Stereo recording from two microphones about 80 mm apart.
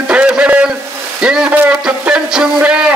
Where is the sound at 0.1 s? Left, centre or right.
Centre.